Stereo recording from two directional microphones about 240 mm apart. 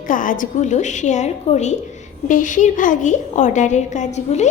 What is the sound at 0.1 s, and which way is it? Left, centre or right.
A woman's voice, left.